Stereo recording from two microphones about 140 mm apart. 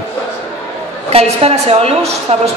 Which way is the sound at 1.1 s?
45° right (ahead or behind).